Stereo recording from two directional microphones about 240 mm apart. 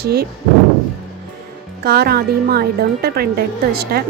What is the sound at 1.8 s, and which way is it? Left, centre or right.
A woman's voice, right.